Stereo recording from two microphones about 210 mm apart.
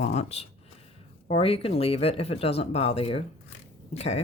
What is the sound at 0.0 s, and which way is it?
Speech, 30° left (ahead or behind).